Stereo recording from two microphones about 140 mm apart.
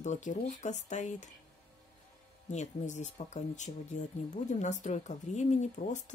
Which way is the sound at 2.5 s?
55° left (ahead or behind).